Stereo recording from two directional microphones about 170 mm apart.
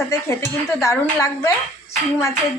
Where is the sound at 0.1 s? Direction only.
15° left (ahead or behind).